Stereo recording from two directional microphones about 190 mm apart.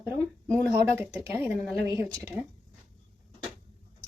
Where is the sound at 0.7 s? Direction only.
15° right (ahead or behind).